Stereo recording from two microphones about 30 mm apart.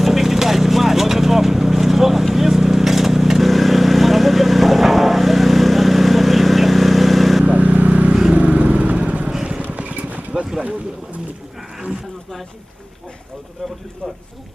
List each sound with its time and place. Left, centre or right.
0.0 s vehicle: centre
7.4 s vehicle: right
8.3 s vehicle: right
13.6 s a sound: centre